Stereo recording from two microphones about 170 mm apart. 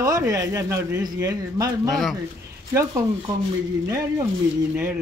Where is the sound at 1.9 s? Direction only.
Centre (ahead or behind).